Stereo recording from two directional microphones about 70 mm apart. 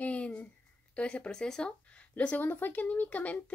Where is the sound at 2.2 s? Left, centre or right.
Left.